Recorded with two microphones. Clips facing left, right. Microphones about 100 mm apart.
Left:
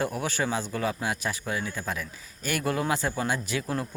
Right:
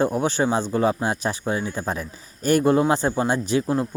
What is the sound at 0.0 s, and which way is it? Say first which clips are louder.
Speech: right 8 dB; 30° right (ahead or behind).